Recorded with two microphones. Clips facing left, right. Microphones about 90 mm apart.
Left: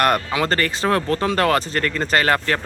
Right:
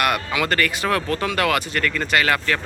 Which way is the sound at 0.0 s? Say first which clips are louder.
Left 3 dB; 35° left (ahead or behind).